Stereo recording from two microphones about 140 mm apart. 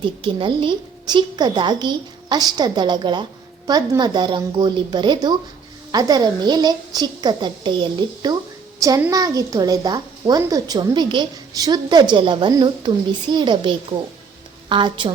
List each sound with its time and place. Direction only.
0.0 s a woman's voice: 35° right (ahead or behind)